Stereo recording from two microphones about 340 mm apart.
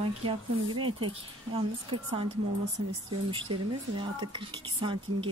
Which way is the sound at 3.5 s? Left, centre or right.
Centre.